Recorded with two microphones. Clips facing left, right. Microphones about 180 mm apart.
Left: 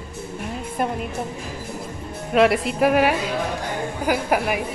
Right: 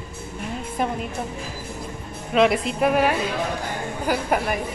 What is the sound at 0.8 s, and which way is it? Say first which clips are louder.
Speech: left 1 dB; 5° left (ahead or behind).